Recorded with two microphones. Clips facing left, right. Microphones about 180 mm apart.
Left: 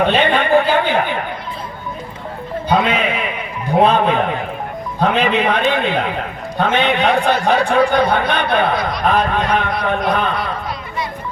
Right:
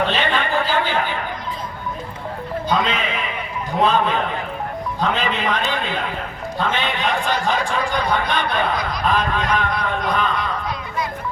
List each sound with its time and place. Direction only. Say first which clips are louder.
0.0 s a woman's voice: left 6 dB; 60° left (ahead or behind)
2.6 s music: left 5 dB; 65° left (ahead or behind)
3.8 s a man's voice: left 5 dB; 60° left (ahead or behind)